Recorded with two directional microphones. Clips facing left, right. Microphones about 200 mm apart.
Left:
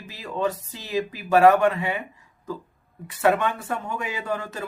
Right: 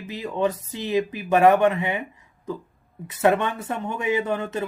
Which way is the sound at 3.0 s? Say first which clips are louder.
Right 1 dB; 20° right (ahead or behind).